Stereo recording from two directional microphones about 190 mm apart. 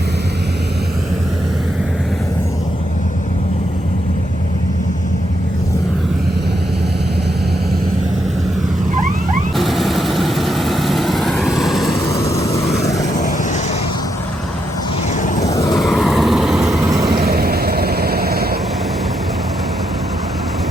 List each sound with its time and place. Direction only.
9.6 s vehicle: centre (ahead or behind)
11.9 s vehicle: 15° left (ahead or behind)
15.1 s vehicle: 40° left (ahead or behind)
15.7 s vehicle: centre (ahead or behind)
17.1 s vehicle: 55° right (ahead or behind)